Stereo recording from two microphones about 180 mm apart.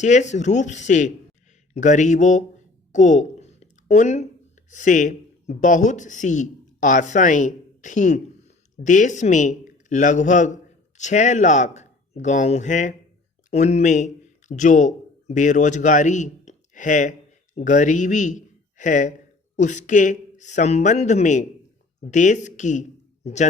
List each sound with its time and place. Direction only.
0.0 s a man's voice: 40° left (ahead or behind)
2.9 s a sound: 45° left (ahead or behind)
4.7 s speech: 45° left (ahead or behind)